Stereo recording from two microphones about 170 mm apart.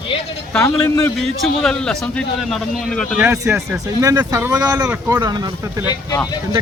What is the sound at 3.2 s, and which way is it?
Speech, 10° right (ahead or behind).